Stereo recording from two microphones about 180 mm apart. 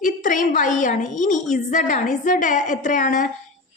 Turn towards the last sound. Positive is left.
turn(degrees=45)  # may be behind; listen again after turning